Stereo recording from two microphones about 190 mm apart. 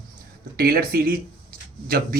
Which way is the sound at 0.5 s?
55° right (ahead or behind).